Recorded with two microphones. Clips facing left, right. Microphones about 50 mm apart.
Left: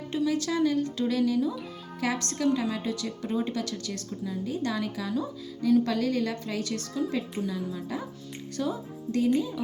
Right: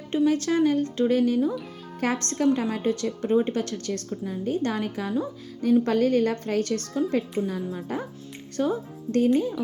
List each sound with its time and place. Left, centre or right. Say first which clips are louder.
0.3 s a woman's voice: right 4 dB; right